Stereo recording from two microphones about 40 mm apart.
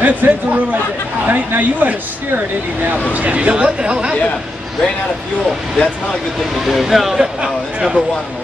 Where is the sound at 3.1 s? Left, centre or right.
Right.